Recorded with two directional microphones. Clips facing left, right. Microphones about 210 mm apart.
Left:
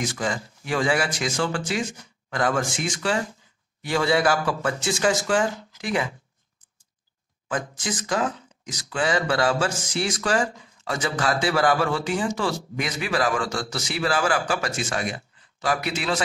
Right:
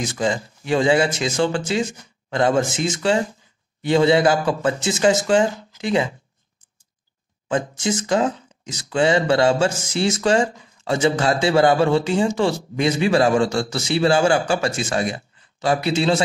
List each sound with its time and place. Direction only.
0.0 s speech: 25° right (ahead or behind)
7.4 s speech: 25° right (ahead or behind)